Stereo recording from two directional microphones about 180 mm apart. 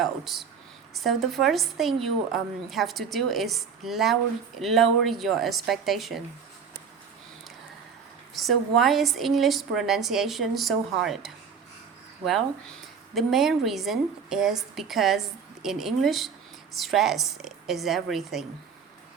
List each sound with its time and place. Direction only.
0.0 s a woman's voice: centre (ahead or behind)
8.4 s a woman's voice: centre (ahead or behind)
13.1 s a woman's voice: centre (ahead or behind)